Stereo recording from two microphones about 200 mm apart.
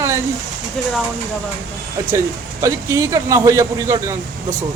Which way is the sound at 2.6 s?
15° right (ahead or behind).